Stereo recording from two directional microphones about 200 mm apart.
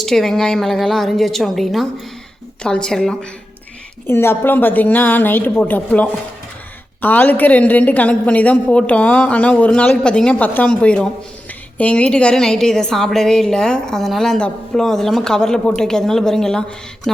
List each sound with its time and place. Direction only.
0.0 s a woman's voice: centre (ahead or behind)